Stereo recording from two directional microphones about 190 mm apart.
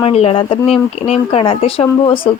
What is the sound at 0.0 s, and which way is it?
Speech, 30° left (ahead or behind).